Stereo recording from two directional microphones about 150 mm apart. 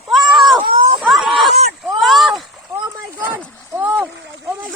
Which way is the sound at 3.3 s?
15° right (ahead or behind).